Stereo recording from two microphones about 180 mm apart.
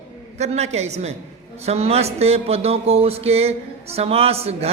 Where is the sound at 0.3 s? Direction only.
35° right (ahead or behind).